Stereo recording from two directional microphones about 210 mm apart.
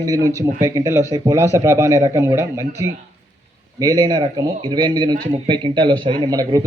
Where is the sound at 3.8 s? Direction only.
15° right (ahead or behind).